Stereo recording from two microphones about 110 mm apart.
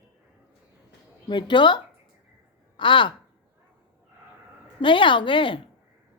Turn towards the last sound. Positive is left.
turn(degrees=50)  # may be behind; listen again after turning